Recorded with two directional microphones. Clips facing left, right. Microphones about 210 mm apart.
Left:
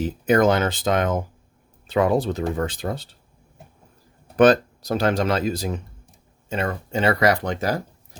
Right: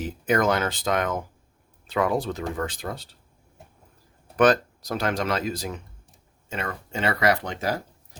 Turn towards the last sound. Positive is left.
turn(degrees=40)  # may be behind; listen again after turning